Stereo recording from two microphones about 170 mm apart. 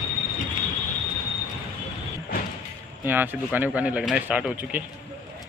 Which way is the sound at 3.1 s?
10° right (ahead or behind).